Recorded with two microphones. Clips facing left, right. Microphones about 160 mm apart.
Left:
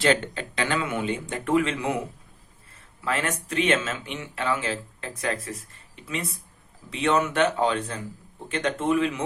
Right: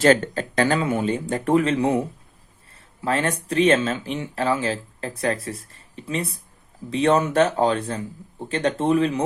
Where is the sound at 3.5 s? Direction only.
35° right (ahead or behind).